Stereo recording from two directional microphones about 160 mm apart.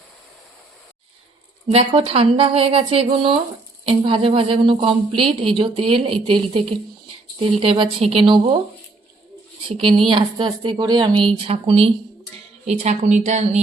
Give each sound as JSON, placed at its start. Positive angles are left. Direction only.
{"t": 1.7, "sound": "speech", "side_deg": -40}
{"t": 7.6, "sound": "speech", "side_deg": -35}
{"t": 9.6, "sound": "a woman's voice", "side_deg": -35}